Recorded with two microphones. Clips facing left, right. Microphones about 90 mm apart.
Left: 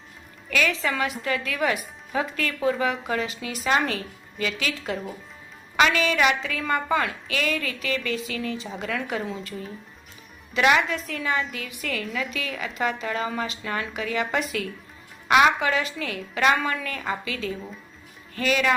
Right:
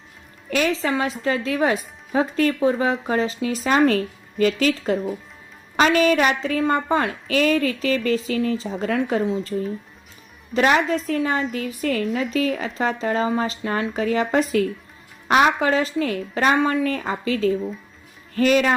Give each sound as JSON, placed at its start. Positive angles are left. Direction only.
{"t": 0.5, "sound": "speech", "side_deg": -35}